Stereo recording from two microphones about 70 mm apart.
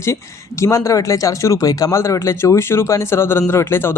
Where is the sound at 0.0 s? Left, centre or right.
Left.